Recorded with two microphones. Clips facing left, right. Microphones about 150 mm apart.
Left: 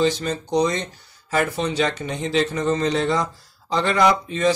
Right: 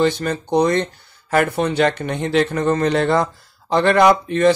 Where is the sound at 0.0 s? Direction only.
55° right (ahead or behind).